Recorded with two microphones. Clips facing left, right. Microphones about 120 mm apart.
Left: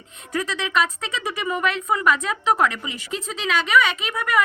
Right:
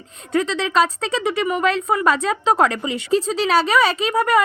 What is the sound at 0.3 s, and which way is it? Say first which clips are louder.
Speech: right 5 dB; 25° right (ahead or behind).